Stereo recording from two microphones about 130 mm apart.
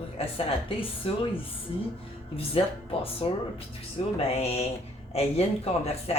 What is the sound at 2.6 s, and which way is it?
A woman's voice, 45° left (ahead or behind).